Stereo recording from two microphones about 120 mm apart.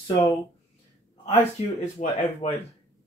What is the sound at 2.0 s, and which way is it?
Speech, 65° left (ahead or behind).